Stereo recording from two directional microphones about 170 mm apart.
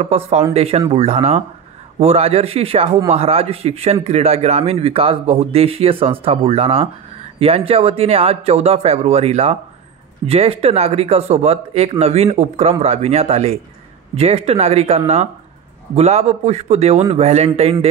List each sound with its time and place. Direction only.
0.0 s speech: 40° right (ahead or behind)